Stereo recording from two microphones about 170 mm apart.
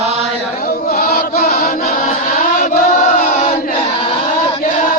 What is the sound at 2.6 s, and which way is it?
Chant, 50° left (ahead or behind).